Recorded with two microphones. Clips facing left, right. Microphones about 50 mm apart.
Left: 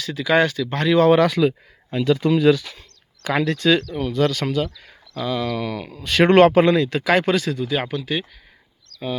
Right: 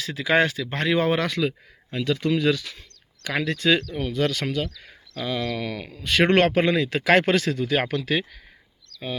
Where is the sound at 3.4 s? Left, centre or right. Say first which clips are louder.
Left 2 dB; centre.